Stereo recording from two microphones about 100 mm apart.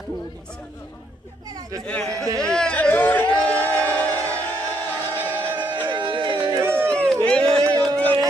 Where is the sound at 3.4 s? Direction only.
15° left (ahead or behind).